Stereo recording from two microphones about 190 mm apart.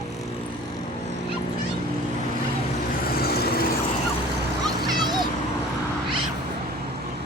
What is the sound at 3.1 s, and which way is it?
Vehicle, 55° left (ahead or behind).